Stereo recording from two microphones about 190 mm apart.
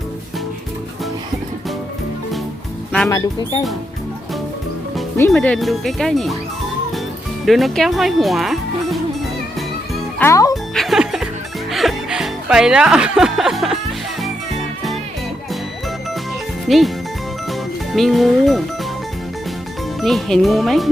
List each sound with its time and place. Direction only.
3.1 s speech: 20° left (ahead or behind)
5.1 s speech: 10° left (ahead or behind)
7.4 s speech: centre (ahead or behind)
10.2 s music: 15° left (ahead or behind)
10.5 s music: centre (ahead or behind)
16.6 s speech: centre (ahead or behind)
17.9 s speech: centre (ahead or behind)
20.0 s speech: centre (ahead or behind)